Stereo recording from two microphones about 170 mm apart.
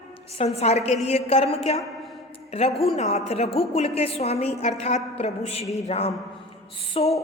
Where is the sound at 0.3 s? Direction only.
35° left (ahead or behind).